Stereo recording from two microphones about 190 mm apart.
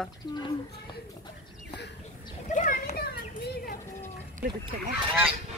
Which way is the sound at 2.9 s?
55° left (ahead or behind).